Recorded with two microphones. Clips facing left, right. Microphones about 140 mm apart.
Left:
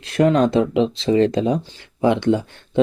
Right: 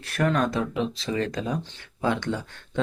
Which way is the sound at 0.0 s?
20° left (ahead or behind).